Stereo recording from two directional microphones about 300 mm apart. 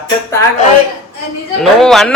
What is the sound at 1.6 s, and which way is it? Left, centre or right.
Speech, centre.